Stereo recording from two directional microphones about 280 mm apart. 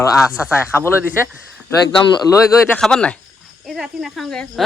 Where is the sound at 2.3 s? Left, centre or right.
Centre.